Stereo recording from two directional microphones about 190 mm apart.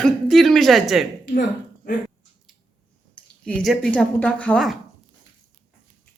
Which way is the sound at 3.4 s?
5° left (ahead or behind).